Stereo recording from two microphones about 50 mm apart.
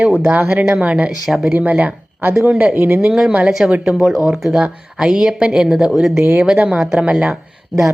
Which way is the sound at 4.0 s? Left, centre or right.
Centre.